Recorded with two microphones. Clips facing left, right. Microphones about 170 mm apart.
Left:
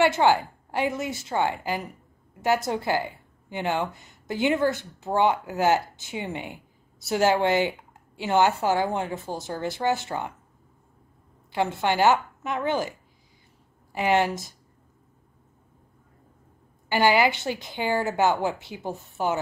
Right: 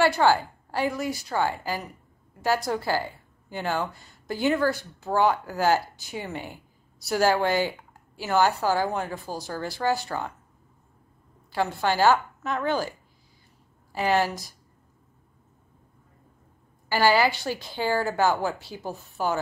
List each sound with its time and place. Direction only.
0.0 s speech: 20° left (ahead or behind)
11.5 s speech: 20° left (ahead or behind)
13.9 s speech: 20° left (ahead or behind)
16.9 s speech: 20° left (ahead or behind)